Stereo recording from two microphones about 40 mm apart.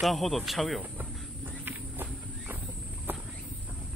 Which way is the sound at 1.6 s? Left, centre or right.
Right.